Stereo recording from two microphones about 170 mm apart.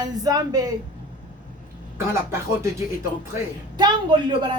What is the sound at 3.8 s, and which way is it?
Speech, 25° right (ahead or behind).